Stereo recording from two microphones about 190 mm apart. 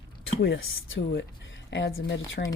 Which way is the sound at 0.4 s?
70° left (ahead or behind).